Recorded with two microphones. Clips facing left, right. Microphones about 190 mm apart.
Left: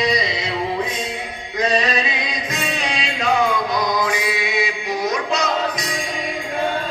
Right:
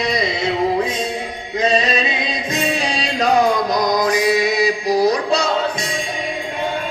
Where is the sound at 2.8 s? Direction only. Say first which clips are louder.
Right 4 dB; 35° right (ahead or behind).